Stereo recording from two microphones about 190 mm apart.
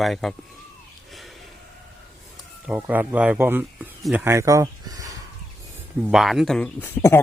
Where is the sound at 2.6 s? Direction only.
10° right (ahead or behind).